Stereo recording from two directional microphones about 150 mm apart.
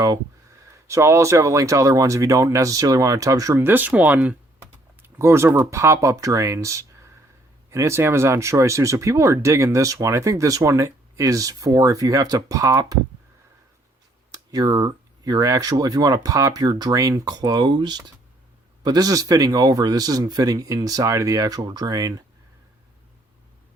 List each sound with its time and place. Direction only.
0.9 s speech: 20° right (ahead or behind)
14.3 s speech: 25° right (ahead or behind)